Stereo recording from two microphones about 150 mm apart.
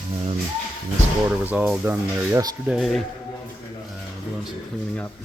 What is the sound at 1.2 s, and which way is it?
Speech, 10° right (ahead or behind).